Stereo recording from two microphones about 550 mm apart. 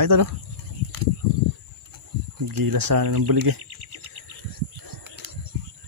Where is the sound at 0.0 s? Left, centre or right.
Right.